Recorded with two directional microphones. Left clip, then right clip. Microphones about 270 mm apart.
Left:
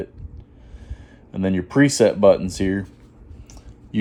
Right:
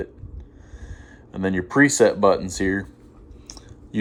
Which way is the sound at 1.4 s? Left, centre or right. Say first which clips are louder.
Even; left.